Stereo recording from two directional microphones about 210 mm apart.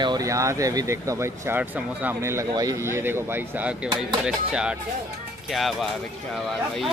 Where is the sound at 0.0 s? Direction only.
20° right (ahead or behind).